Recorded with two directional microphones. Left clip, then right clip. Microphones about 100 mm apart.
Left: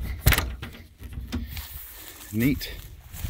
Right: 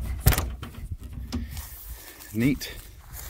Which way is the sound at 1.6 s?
5° right (ahead or behind).